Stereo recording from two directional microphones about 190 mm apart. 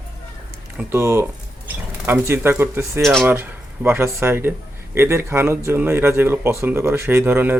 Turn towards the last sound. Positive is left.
turn(degrees=-10)  # may be behind; listen again after turning